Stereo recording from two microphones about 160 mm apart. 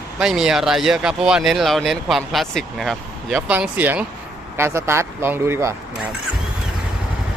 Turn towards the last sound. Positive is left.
turn(degrees=-15)  # may be behind; listen again after turning